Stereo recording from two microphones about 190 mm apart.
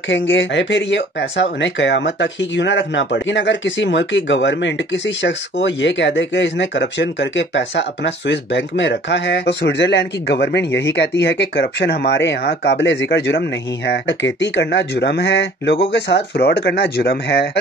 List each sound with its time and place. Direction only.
0.1 s speech: 70° left (ahead or behind)